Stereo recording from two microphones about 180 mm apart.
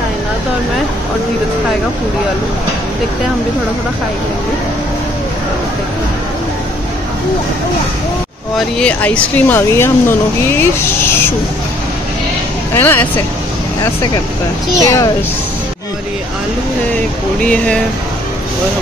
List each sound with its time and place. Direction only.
8.7 s speech: 5° left (ahead or behind)
12.7 s speech: 10° left (ahead or behind)
14.8 s speech: 15° left (ahead or behind)
17.4 s speech: 5° left (ahead or behind)